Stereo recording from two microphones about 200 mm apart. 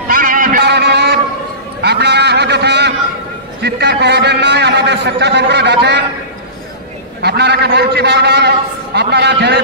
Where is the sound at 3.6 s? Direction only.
55° right (ahead or behind).